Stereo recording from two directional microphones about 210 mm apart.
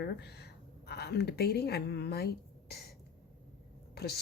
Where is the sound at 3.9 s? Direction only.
50° left (ahead or behind).